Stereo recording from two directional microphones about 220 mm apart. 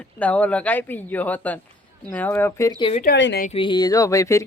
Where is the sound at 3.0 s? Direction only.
50° left (ahead or behind).